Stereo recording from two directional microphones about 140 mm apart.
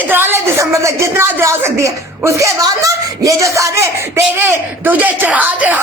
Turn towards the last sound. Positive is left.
turn(degrees=-10)  # may be behind; listen again after turning